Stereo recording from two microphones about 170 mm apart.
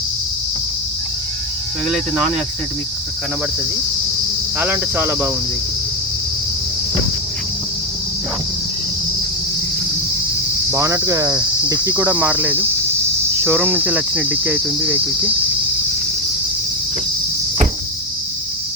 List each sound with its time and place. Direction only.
4.5 s cricket: 10° right (ahead or behind)
10.7 s cricket: 20° right (ahead or behind)